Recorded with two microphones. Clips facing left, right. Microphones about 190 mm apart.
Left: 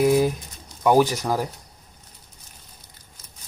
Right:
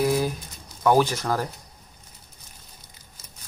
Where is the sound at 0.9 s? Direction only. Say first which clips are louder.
Left 2 dB; 15° left (ahead or behind).